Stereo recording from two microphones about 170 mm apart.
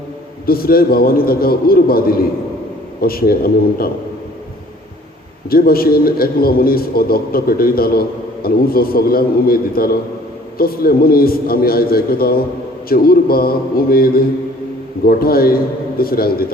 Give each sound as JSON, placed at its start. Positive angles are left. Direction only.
{"t": 0.4, "sound": "a man's voice", "side_deg": 60}
{"t": 5.5, "sound": "a man's voice", "side_deg": 60}